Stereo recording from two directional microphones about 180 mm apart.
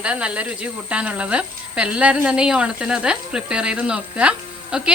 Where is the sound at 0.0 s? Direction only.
5° right (ahead or behind).